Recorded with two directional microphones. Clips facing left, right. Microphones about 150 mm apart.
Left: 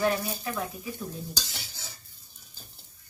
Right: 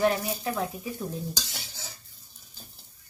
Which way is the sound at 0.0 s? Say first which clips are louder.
Right 2 dB; 30° right (ahead or behind).